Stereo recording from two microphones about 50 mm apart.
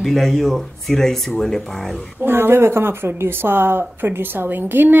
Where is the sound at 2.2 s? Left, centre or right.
Right.